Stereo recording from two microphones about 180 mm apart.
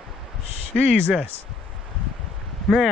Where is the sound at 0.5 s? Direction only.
35° left (ahead or behind).